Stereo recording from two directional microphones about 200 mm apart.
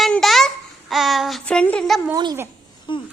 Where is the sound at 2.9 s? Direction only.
25° left (ahead or behind).